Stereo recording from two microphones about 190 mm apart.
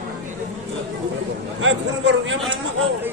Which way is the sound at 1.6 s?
80° right.